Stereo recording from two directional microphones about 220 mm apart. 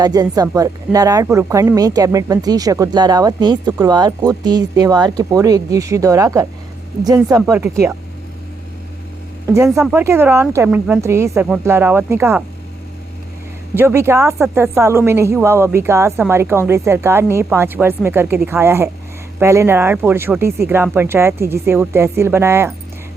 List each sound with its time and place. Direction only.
0.0 s speech: 15° right (ahead or behind)
9.8 s speech: 10° right (ahead or behind)
13.7 s speech: 10° right (ahead or behind)